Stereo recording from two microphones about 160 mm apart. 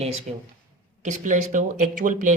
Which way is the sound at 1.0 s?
50° right (ahead or behind).